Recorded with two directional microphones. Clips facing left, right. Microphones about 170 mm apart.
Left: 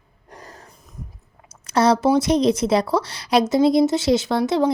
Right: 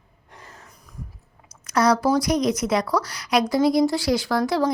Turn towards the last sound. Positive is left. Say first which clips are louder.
# left 2 dB
turn(degrees=25)  # may be behind; listen again after turning